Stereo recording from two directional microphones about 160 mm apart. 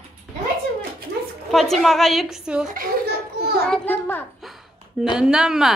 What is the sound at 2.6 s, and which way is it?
Speech, 60° right (ahead or behind).